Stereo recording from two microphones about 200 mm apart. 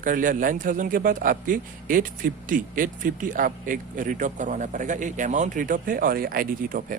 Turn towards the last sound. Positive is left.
turn(degrees=-45)  # may be behind; listen again after turning